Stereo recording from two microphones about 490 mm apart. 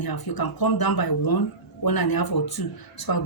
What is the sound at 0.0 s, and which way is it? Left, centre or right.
Speech, left.